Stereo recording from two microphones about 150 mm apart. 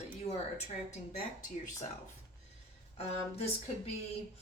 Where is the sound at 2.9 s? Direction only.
40° left (ahead or behind).